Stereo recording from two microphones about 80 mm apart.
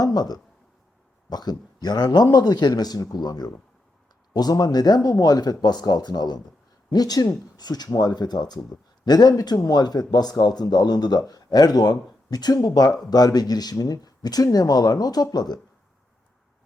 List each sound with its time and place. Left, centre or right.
0.0 s a man's voice: left